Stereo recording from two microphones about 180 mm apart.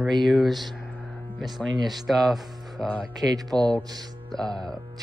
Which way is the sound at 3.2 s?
20° right (ahead or behind).